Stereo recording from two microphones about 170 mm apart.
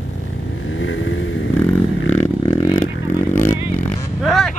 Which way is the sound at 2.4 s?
25° left (ahead or behind).